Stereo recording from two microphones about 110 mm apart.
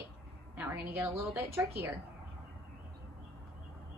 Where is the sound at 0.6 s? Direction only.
15° right (ahead or behind).